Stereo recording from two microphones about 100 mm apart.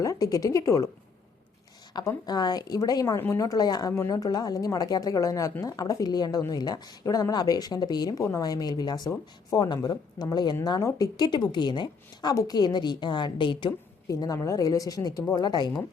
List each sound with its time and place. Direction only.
0.0 s speech: 35° left (ahead or behind)
1.9 s a woman's voice: 45° left (ahead or behind)
12.3 s a woman's voice: 35° left (ahead or behind)
14.1 s speech: 35° left (ahead or behind)